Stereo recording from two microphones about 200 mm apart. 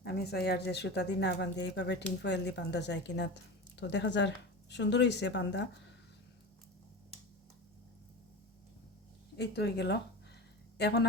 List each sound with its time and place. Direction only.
0.0 s speech: 55° left (ahead or behind)
9.4 s speech: 55° left (ahead or behind)